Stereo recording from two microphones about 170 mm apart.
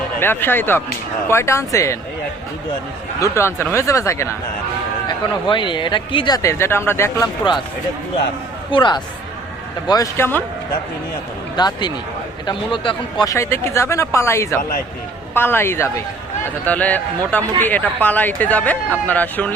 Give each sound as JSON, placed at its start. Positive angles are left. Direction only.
{"t": 0.2, "sound": "speech", "side_deg": 10}
{"t": 3.3, "sound": "speech", "side_deg": 15}
{"t": 5.0, "sound": "speech", "side_deg": 30}
{"t": 8.7, "sound": "speech", "side_deg": 25}
{"t": 11.5, "sound": "speech", "side_deg": 25}
{"t": 13.2, "sound": "speech", "side_deg": 20}